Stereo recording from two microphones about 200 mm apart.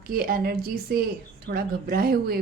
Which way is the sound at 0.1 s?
45° right (ahead or behind).